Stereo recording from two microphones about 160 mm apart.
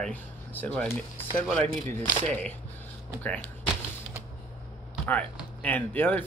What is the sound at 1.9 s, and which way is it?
Speech, 10° left (ahead or behind).